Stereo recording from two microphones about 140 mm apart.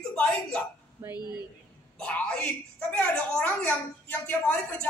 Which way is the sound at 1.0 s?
15° right (ahead or behind).